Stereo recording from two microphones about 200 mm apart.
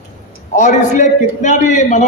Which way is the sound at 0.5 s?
35° left (ahead or behind).